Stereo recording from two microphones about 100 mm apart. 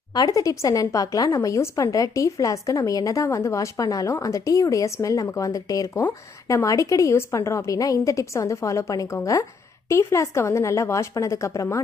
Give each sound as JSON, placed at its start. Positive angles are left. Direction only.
{"t": 0.1, "sound": "a woman's voice", "side_deg": 35}